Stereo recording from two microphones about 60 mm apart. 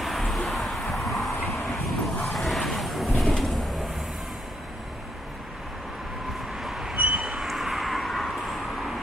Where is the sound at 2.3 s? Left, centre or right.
Centre.